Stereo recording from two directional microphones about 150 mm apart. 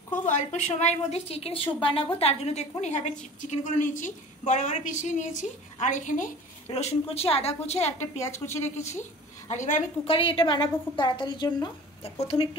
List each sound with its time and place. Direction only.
0.3 s a woman's voice: 55° left (ahead or behind)
8.0 s a woman's voice: 20° left (ahead or behind)
8.6 s a woman's voice: 50° left (ahead or behind)
10.0 s a woman's voice: 35° left (ahead or behind)